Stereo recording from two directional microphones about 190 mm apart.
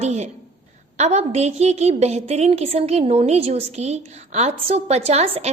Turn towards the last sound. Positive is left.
turn(degrees=-35)  # may be behind; listen again after turning